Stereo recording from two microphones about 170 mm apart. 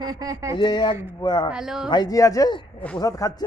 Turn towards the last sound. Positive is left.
turn(degrees=20)  # may be behind; listen again after turning